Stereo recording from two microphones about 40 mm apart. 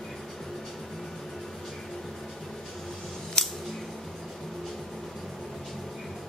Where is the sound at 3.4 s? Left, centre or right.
Centre.